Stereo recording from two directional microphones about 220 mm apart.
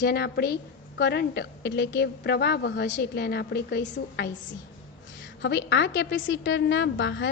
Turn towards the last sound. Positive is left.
turn(degrees=55)  # may be behind; listen again after turning